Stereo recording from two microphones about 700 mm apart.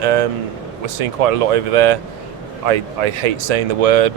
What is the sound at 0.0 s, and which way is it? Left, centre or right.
Speech, right.